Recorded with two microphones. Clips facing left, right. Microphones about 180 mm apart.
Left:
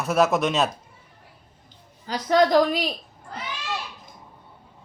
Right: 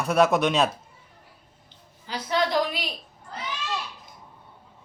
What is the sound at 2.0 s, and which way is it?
Speech, 45° left (ahead or behind).